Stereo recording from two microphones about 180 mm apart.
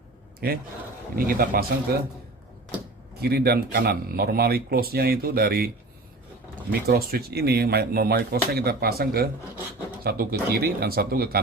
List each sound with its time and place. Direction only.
0.3 s a man's voice: 60° right (ahead or behind)
3.2 s speech: 60° right (ahead or behind)